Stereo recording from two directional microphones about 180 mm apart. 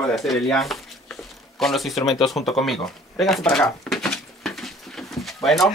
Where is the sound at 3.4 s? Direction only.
5° left (ahead or behind).